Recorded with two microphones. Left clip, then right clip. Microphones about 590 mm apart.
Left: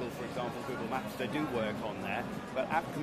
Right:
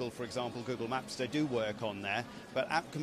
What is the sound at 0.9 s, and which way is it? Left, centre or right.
Speech, right.